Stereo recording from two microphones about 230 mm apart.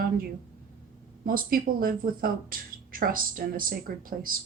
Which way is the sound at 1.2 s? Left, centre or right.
Right.